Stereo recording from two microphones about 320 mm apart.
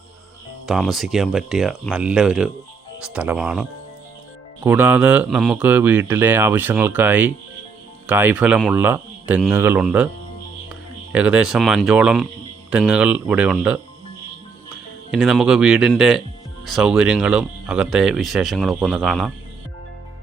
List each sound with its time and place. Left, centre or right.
0.7 s speech: centre
11.1 s speech: centre
15.1 s speech: centre